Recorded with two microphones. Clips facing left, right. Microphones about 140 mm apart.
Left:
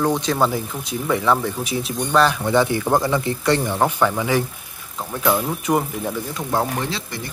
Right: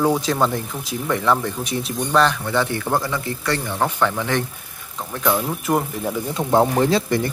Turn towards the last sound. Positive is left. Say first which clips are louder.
# right 9 dB
turn(degrees=-50)  # may be behind; listen again after turning